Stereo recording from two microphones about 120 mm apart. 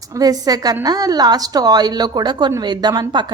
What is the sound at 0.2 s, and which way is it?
A woman's voice, 30° right (ahead or behind).